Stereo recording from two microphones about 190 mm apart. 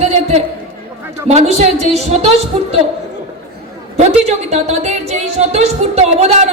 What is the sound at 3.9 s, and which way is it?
Speech, 35° right (ahead or behind).